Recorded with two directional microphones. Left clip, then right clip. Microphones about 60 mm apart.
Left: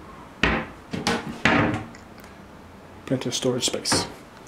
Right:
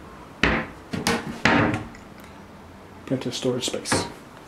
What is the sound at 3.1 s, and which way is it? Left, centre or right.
Speech, left.